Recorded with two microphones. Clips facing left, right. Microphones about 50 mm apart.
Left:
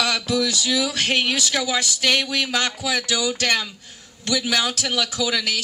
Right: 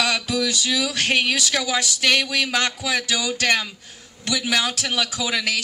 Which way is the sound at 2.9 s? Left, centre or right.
Centre.